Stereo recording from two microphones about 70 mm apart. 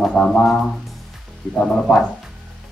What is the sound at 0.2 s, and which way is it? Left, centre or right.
Speech, centre.